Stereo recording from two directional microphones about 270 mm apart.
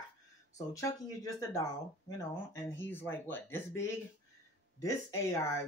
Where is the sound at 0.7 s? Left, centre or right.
Centre.